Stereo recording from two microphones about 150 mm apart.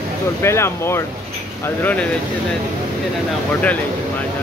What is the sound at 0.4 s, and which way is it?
Speech, 15° left (ahead or behind).